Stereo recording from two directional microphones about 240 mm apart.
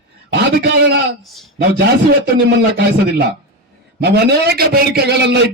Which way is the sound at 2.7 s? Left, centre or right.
Right.